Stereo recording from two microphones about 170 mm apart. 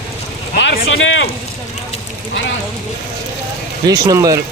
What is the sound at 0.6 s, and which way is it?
Speech, 90° left.